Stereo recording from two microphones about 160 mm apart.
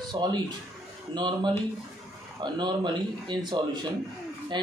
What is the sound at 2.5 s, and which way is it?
Speech, 30° right (ahead or behind).